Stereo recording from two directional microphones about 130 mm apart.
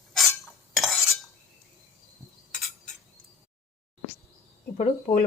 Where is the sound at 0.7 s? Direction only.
Centre (ahead or behind).